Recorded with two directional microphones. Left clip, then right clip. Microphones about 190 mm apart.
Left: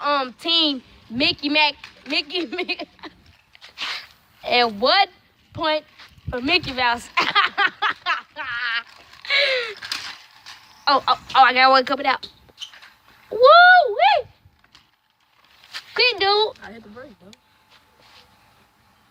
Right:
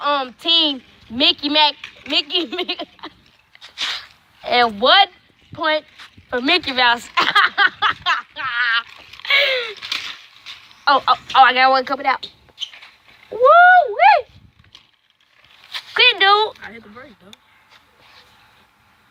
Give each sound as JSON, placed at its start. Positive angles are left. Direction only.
{"t": 0.0, "sound": "speech", "side_deg": 15}
{"t": 1.1, "sound": "speech", "side_deg": -5}
{"t": 3.6, "sound": "sneeze", "side_deg": -35}
{"t": 3.9, "sound": "a sound", "side_deg": 0}
{"t": 6.0, "sound": "a sound", "side_deg": -55}
{"t": 6.4, "sound": "speech", "side_deg": -5}
{"t": 8.3, "sound": "speech", "side_deg": -25}
{"t": 8.7, "sound": "a sound", "side_deg": -5}
{"t": 9.7, "sound": "a sound", "side_deg": 20}
{"t": 10.8, "sound": "speech", "side_deg": 5}
{"t": 11.7, "sound": "speech", "side_deg": 20}
{"t": 13.5, "sound": "speech", "side_deg": 30}
{"t": 13.8, "sound": "speech", "side_deg": 0}
{"t": 16.0, "sound": "speech", "side_deg": 25}